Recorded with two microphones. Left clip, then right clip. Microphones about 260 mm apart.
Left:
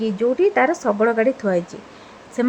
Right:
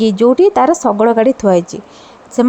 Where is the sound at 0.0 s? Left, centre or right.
Right.